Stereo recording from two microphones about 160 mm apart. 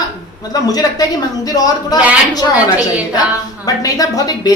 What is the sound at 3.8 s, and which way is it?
Speech, 20° left (ahead or behind).